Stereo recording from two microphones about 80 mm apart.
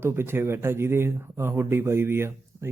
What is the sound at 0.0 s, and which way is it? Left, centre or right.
Speech, right.